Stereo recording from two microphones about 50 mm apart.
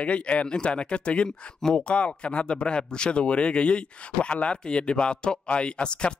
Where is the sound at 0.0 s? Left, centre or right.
Left.